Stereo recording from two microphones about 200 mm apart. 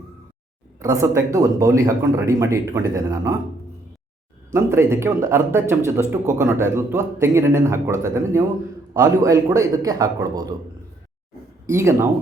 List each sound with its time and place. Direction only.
0.8 s speech: 15° right (ahead or behind)
4.5 s speech: 15° right (ahead or behind)
11.6 s speech: 15° right (ahead or behind)